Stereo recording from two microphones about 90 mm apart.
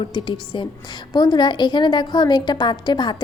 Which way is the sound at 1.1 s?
50° left (ahead or behind).